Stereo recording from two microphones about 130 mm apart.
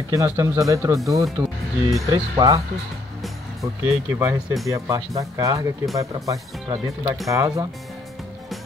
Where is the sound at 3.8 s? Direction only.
20° right (ahead or behind).